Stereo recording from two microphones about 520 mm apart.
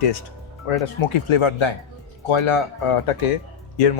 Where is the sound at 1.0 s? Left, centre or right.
Left.